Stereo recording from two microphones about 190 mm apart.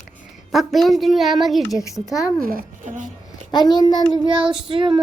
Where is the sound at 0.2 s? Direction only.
Centre (ahead or behind).